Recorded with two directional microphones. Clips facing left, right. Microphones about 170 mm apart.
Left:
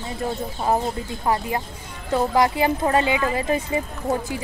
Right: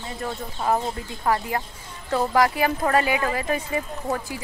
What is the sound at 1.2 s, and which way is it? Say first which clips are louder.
Speech: even; 20° left (ahead or behind).